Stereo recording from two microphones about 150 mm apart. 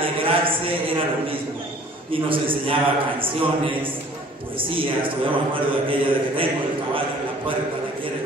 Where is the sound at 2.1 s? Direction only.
35° right (ahead or behind).